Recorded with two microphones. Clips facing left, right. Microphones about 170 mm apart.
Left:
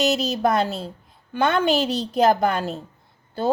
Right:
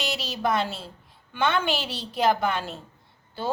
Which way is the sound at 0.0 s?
40° left (ahead or behind).